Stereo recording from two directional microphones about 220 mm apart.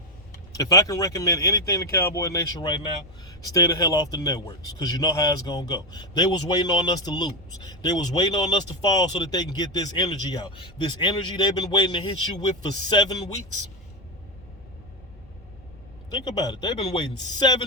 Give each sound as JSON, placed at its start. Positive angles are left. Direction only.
{"t": 0.5, "sound": "speech", "side_deg": 15}
{"t": 16.0, "sound": "speech", "side_deg": 20}